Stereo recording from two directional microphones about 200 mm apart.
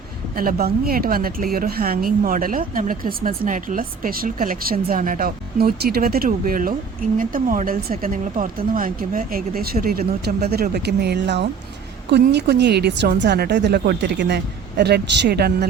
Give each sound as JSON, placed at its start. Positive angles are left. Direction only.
{"t": 0.3, "sound": "a woman's voice", "side_deg": -50}